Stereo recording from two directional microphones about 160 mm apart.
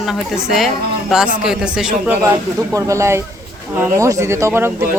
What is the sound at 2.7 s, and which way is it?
Speech, 20° right (ahead or behind).